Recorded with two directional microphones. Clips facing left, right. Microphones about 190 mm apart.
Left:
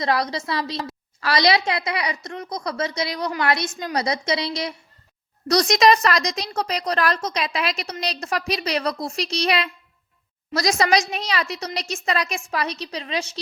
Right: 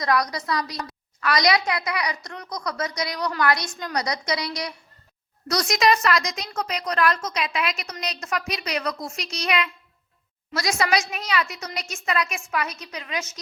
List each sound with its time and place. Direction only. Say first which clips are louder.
0.0 s a woman's voice: left 1 dB; 25° left (ahead or behind)
5.5 s a woman's voice: left 4 dB; 35° left (ahead or behind)